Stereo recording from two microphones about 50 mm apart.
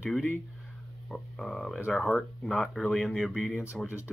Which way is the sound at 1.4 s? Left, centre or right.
Centre.